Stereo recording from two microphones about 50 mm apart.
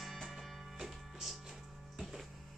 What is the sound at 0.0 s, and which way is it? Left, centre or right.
Music, centre.